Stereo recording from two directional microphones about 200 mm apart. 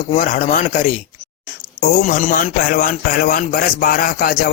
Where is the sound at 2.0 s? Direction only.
45° left (ahead or behind).